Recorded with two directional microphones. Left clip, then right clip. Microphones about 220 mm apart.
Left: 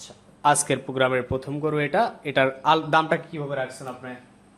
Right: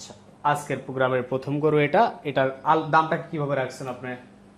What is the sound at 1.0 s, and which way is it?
A man's voice, 5° left (ahead or behind).